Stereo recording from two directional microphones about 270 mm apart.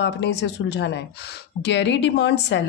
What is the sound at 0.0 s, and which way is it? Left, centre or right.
Speech, left.